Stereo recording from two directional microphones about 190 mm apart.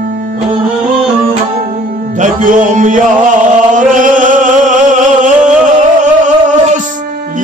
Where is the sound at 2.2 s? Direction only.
45° right (ahead or behind).